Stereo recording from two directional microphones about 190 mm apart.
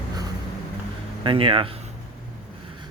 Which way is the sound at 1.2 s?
25° right (ahead or behind).